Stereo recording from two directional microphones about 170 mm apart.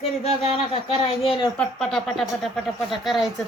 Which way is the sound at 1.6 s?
5° left (ahead or behind).